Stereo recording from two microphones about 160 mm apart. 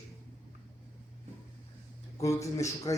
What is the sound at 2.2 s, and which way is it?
Speech, 20° left (ahead or behind).